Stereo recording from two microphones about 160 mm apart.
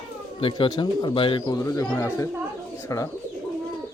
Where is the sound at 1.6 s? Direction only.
15° left (ahead or behind).